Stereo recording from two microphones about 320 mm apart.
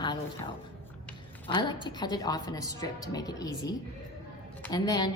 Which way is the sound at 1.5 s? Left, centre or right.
Centre.